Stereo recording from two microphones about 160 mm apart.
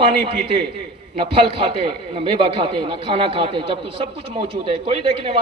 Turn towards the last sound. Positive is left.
turn(degrees=-35)  # may be behind; listen again after turning